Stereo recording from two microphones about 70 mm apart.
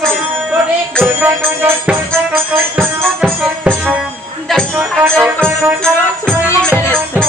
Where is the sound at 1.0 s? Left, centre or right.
Right.